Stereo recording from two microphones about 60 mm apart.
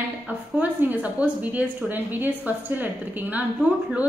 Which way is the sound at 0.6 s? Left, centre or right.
Right.